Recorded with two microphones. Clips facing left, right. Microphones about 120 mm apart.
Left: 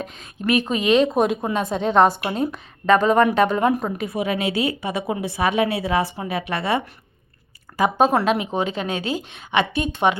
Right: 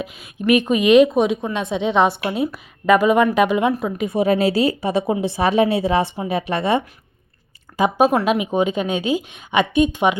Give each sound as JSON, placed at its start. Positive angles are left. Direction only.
{"t": 0.0, "sound": "speech", "side_deg": -10}
{"t": 1.1, "sound": "a woman's voice", "side_deg": 0}
{"t": 3.7, "sound": "a woman's voice", "side_deg": 15}
{"t": 3.9, "sound": "a woman's voice", "side_deg": -20}
{"t": 4.2, "sound": "a woman's voice", "side_deg": -35}
{"t": 7.8, "sound": "speech", "side_deg": -10}